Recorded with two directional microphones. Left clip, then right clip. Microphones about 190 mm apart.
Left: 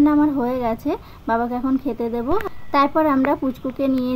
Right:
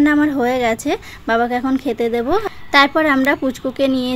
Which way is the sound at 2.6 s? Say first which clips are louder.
Right 4 dB; 10° right (ahead or behind).